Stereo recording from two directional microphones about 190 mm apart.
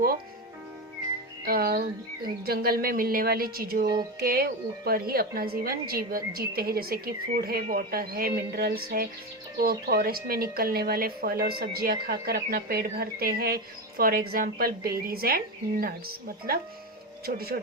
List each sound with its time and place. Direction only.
1.5 s a woman's voice: 55° right (ahead or behind)